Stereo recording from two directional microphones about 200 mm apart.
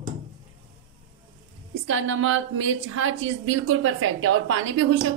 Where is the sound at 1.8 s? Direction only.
75° right (ahead or behind).